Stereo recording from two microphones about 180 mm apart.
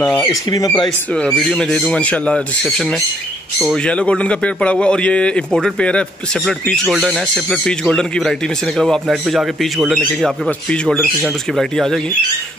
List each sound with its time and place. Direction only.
0.2 s speech: 20° left (ahead or behind)
1.1 s a man's voice: 5° left (ahead or behind)